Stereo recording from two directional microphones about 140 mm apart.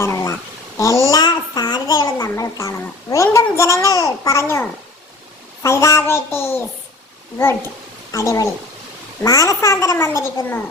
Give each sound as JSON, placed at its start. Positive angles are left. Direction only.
{"t": 0.0, "sound": "a sound", "side_deg": 20}
{"t": 0.8, "sound": "a child's voice", "side_deg": 20}
{"t": 1.1, "sound": "a sound", "side_deg": 30}
{"t": 3.5, "sound": "a child's voice", "side_deg": 20}
{"t": 5.6, "sound": "child singing", "side_deg": 20}
{"t": 8.1, "sound": "a child's voice", "side_deg": 25}